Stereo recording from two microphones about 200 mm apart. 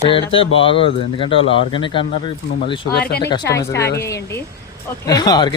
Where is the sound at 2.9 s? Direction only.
50° left (ahead or behind).